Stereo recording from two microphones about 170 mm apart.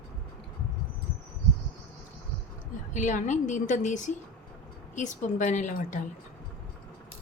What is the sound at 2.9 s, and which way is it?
A woman's voice, 45° left (ahead or behind).